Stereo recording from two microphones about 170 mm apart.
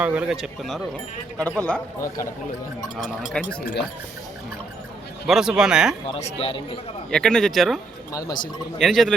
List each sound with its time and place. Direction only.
0.0 s speech: 10° right (ahead or behind)
3.0 s speech: centre (ahead or behind)
5.2 s speech: centre (ahead or behind)
6.1 s speech: 35° left (ahead or behind)
7.1 s speech: 5° left (ahead or behind)
8.1 s speech: 25° left (ahead or behind)
8.8 s speech: centre (ahead or behind)